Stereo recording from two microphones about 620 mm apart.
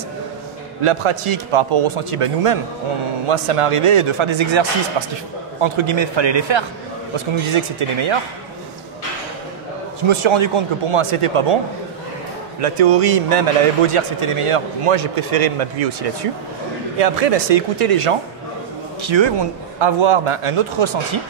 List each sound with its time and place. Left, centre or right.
0.8 s a man's voice: right
10.0 s a man's voice: right
12.5 s a man's voice: right
18.9 s a man's voice: right